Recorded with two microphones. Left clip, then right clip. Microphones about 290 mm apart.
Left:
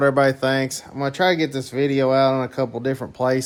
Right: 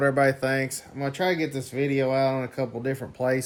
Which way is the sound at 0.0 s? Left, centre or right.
Centre.